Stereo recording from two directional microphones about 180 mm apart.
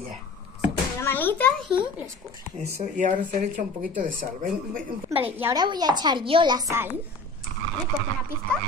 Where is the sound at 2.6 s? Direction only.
45° right (ahead or behind).